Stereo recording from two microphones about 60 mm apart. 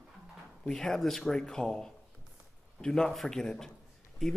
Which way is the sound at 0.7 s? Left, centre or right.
Centre.